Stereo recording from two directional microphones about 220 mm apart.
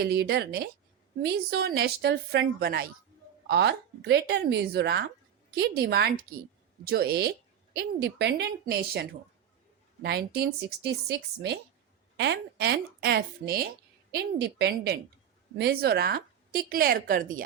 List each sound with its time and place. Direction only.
0.0 s a woman's voice: 45° right (ahead or behind)